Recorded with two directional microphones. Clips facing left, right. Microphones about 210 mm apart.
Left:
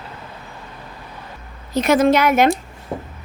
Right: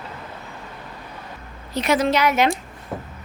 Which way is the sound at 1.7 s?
45° left (ahead or behind).